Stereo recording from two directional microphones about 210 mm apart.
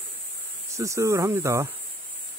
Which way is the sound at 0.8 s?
15° right (ahead or behind).